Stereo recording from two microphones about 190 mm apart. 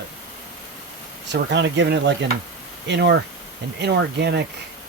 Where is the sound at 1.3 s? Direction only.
65° right (ahead or behind).